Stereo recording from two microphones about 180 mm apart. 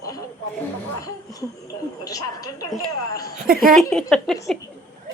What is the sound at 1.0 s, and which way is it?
A woman's voice, 20° left (ahead or behind).